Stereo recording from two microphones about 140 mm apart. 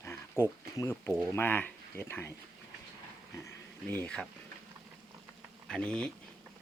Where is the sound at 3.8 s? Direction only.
10° left (ahead or behind).